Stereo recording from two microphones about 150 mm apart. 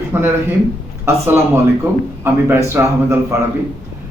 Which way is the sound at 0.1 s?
15° right (ahead or behind).